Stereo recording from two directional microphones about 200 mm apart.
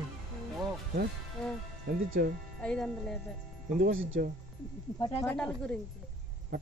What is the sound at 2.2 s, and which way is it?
Speech, 50° right (ahead or behind).